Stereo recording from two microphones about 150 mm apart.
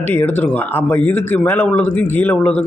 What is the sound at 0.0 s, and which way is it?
A man's voice, 15° left (ahead or behind).